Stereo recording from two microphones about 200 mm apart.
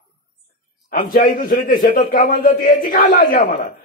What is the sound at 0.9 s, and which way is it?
A man's voice, 45° left (ahead or behind).